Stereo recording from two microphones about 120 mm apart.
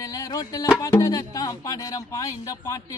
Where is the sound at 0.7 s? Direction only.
25° left (ahead or behind).